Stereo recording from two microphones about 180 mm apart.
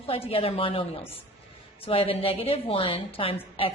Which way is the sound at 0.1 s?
30° left (ahead or behind).